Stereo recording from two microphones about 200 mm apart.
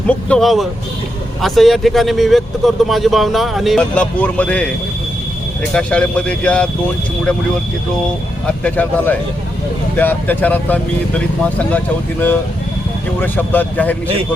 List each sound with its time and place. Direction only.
0.1 s speech: 5° left (ahead or behind)
5.7 s speech: 5° left (ahead or behind)
8.4 s speech: 5° left (ahead or behind)
13.1 s speech: 10° left (ahead or behind)